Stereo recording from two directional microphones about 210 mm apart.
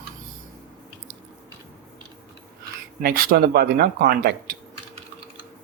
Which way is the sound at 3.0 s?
45° right (ahead or behind).